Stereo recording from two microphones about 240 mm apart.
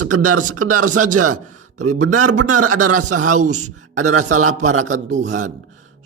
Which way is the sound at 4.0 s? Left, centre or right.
Right.